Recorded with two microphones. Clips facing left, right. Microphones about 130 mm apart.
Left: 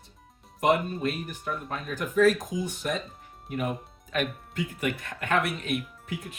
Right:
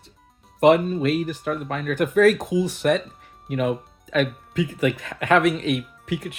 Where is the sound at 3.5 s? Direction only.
90° right.